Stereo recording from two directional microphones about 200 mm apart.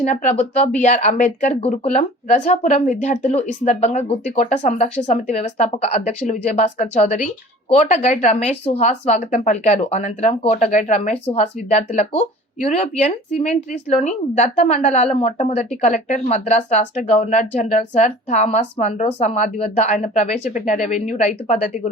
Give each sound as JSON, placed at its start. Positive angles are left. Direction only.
{"t": 0.0, "sound": "speech", "side_deg": 35}